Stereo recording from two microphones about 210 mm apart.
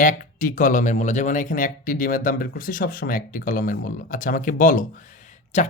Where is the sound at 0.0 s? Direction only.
40° left (ahead or behind).